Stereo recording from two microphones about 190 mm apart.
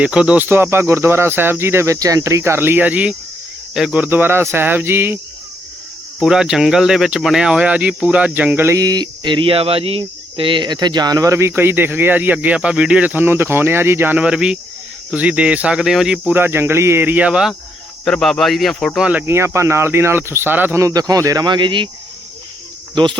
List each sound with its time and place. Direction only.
0.0 s speech: 5° right (ahead or behind); by 21.8 s 25° right (ahead or behind)